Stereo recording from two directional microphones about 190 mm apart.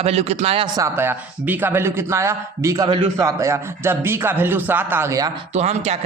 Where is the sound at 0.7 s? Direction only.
15° right (ahead or behind).